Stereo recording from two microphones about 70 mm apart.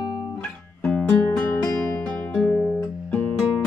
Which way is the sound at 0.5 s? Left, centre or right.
Centre.